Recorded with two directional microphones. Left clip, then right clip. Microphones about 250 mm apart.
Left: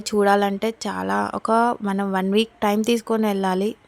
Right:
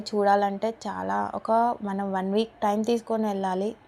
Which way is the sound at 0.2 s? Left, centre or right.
Left.